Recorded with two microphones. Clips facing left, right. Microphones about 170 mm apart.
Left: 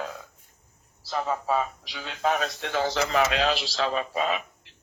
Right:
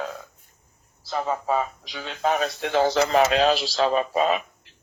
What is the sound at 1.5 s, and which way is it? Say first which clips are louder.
Speech: right 2 dB; 35° right (ahead or behind).